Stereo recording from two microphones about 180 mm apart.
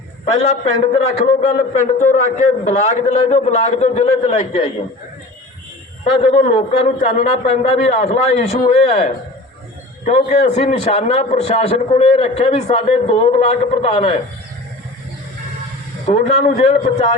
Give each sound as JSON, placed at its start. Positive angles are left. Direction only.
{"t": 0.4, "sound": "a man's voice", "side_deg": 40}
{"t": 6.2, "sound": "a man's voice", "side_deg": 35}
{"t": 16.0, "sound": "a man's voice", "side_deg": 40}